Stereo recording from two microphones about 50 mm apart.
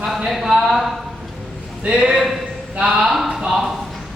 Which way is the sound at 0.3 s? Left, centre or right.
Centre.